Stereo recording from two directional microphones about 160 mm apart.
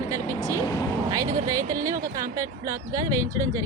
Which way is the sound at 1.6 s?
60° right (ahead or behind).